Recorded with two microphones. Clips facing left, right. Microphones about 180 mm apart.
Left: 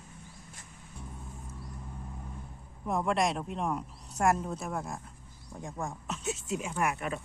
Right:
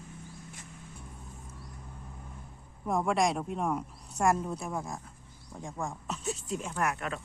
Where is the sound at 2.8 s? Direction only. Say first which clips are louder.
Right 1 dB; centre (ahead or behind).